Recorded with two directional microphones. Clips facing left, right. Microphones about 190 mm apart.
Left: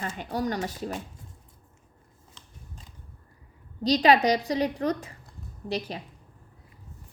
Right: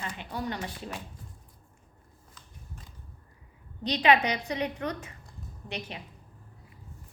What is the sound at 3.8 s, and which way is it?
A woman's voice, 35° left (ahead or behind).